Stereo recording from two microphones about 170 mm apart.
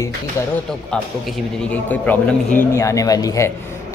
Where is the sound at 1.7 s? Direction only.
10° left (ahead or behind).